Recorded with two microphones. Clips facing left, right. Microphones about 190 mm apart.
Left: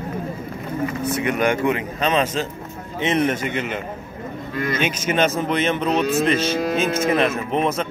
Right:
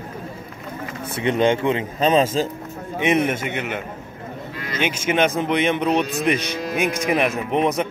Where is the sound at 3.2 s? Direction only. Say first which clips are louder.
Left 2 dB; 10° right (ahead or behind).